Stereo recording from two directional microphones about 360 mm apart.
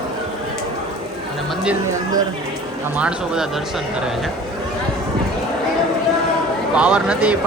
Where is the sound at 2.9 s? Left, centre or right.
Centre.